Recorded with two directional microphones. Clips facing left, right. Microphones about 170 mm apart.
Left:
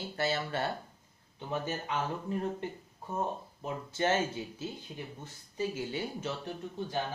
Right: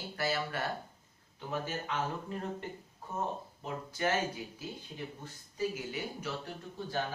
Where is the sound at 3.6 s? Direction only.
25° left (ahead or behind).